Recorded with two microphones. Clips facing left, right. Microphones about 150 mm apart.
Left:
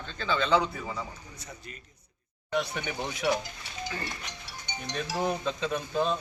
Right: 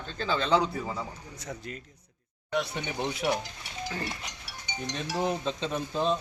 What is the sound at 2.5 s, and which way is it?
Speech, centre (ahead or behind).